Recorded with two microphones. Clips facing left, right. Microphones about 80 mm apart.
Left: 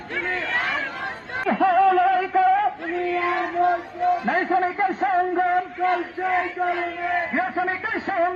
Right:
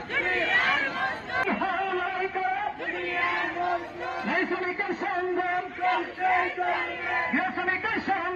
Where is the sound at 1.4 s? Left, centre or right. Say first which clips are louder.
Left 13 dB; left.